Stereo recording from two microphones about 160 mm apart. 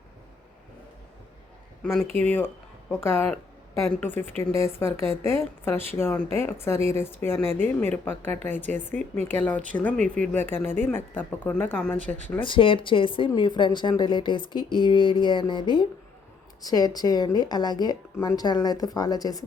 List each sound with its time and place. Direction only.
1.8 s speech: 5° left (ahead or behind)
2.0 s speech: 40° right (ahead or behind)
2.9 s speech: 15° left (ahead or behind)
8.6 s speech: 50° right (ahead or behind)
9.4 s speech: 10° left (ahead or behind)
12.4 s a woman's voice: 35° left (ahead or behind)